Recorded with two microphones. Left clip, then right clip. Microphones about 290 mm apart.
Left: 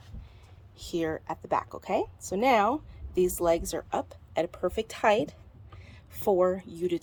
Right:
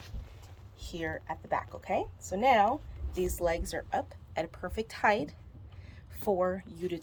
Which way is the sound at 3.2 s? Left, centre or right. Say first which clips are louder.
Left 5 dB; centre.